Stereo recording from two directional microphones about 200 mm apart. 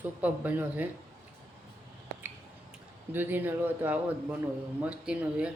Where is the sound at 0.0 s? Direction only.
10° right (ahead or behind).